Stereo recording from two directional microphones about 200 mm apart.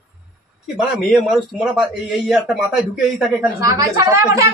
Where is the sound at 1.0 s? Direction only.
Centre (ahead or behind).